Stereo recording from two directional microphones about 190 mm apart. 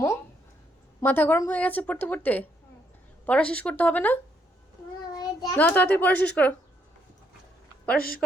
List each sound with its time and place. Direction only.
1.0 s a woman's voice: 10° left (ahead or behind)
5.1 s child singing: 20° left (ahead or behind)
5.5 s a woman's voice: 10° left (ahead or behind)
7.9 s a woman's voice: 50° left (ahead or behind)